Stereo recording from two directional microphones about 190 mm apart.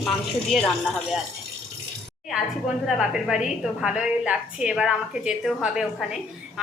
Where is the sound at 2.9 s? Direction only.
5° right (ahead or behind).